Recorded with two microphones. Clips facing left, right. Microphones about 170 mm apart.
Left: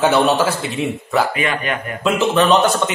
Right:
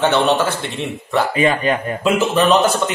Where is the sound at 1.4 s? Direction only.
30° right (ahead or behind).